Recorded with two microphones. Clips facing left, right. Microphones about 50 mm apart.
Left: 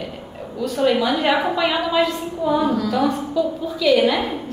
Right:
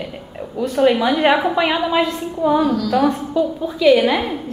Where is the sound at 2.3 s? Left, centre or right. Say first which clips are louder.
Right 4 dB; centre.